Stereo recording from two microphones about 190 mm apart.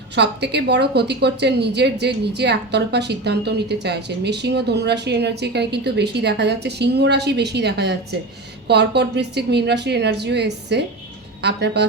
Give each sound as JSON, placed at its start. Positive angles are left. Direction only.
{"t": 0.2, "sound": "a woman's voice", "side_deg": -60}